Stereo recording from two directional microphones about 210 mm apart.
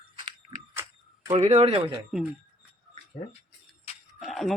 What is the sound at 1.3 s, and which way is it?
Speech, 35° right (ahead or behind).